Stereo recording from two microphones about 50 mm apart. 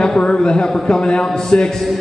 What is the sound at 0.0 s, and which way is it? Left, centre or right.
A man's voice, centre.